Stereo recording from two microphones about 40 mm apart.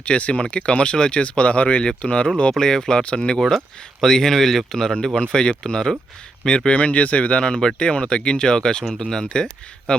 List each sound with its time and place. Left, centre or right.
0.0 s speech: left
1.8 s speech: left
2.5 s speech: centre
3.3 s speech: centre
4.0 s speech: centre
6.7 s speech: left
7.4 s speech: centre